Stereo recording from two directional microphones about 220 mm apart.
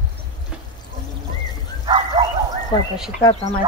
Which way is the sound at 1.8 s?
20° right (ahead or behind).